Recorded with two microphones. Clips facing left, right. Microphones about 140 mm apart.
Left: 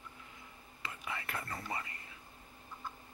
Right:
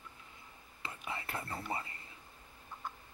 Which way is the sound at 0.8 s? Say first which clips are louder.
Even; 25° right (ahead or behind).